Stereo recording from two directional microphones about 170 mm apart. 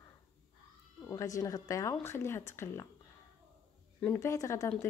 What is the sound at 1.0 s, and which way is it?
Speech, 20° left (ahead or behind).